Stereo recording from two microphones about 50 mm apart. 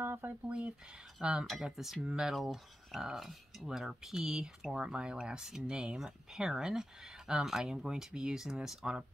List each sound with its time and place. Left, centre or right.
0.0 s a sound: right
0.5 s speech: right
1.6 s speech: centre